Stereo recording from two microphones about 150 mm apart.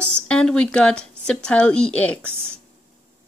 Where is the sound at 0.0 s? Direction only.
5° left (ahead or behind).